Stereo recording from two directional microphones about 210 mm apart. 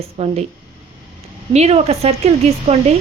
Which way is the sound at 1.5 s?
30° right (ahead or behind).